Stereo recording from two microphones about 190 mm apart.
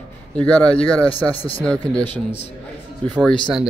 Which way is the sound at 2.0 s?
35° left (ahead or behind).